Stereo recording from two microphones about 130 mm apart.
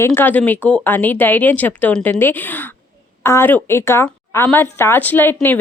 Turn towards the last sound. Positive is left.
turn(degrees=15)  # may be behind; listen again after turning